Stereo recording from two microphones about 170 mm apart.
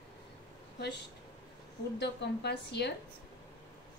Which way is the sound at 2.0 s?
80° left.